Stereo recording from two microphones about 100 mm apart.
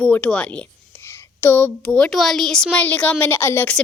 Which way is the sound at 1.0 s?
20° left (ahead or behind).